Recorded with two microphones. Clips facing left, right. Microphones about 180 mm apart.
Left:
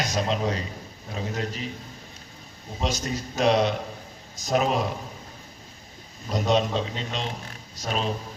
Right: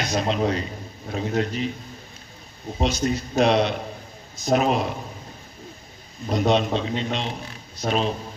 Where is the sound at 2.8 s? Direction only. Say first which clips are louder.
Right 5 dB; 40° left (ahead or behind).